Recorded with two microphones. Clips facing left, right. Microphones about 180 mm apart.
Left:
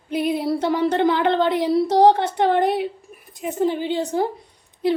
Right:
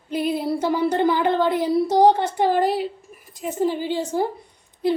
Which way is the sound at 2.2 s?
65° left (ahead or behind).